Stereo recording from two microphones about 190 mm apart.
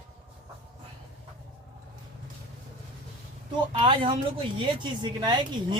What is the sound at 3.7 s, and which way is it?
Speech, 30° right (ahead or behind).